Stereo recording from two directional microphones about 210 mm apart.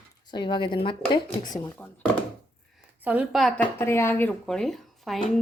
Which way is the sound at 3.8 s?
10° left (ahead or behind).